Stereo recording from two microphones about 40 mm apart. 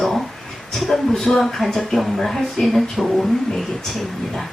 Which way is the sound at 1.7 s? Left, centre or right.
Centre.